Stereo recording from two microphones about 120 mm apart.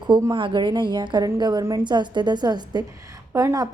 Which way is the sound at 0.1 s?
40° right (ahead or behind).